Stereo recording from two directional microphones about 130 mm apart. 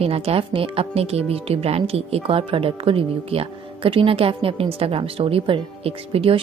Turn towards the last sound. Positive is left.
turn(degrees=-50)  # may be behind; listen again after turning